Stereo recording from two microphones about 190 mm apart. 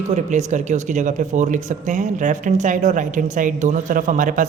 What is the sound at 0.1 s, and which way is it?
Speech, 40° right (ahead or behind).